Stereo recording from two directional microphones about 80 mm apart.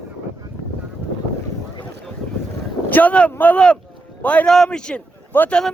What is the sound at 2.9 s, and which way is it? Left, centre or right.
Speech, left.